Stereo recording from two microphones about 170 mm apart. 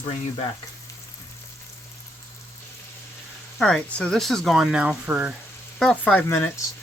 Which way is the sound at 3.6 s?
5° left (ahead or behind).